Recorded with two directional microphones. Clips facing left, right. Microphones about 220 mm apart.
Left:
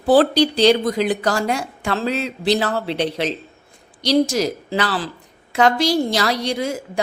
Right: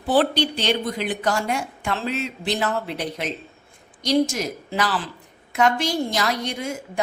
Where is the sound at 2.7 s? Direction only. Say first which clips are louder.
Left 6 dB; 30° left (ahead or behind).